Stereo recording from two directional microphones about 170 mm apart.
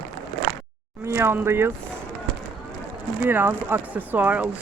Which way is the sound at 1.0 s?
15° right (ahead or behind).